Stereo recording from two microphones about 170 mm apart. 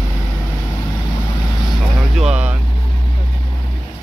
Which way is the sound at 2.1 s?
5° right (ahead or behind).